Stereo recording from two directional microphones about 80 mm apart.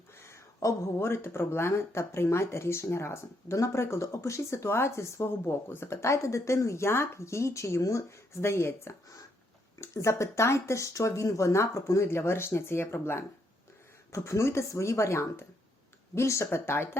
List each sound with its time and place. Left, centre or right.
0.2 s speech: left